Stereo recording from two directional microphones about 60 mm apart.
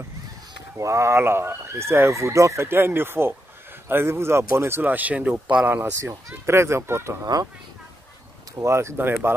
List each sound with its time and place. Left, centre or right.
0.7 s speech: right
1.2 s speech: right
4.8 s speech: right
5.7 s speech: right
8.5 s speech: right
8.9 s speech: right